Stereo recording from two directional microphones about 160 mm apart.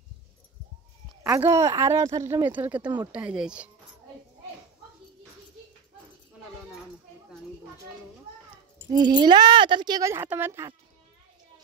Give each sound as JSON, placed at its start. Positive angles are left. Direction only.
{"t": 1.2, "sound": "speech", "side_deg": -20}
{"t": 8.9, "sound": "speech", "side_deg": -25}